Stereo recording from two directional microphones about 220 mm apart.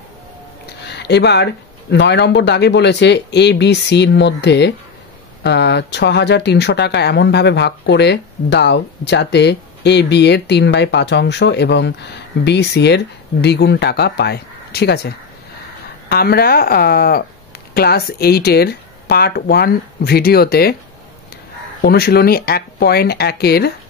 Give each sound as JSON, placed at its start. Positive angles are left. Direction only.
{"t": 0.8, "sound": "speech", "side_deg": 50}
{"t": 16.1, "sound": "speech", "side_deg": 45}
{"t": 21.8, "sound": "speech", "side_deg": 45}